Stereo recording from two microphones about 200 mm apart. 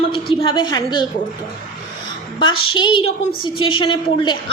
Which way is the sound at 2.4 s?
25° left (ahead or behind).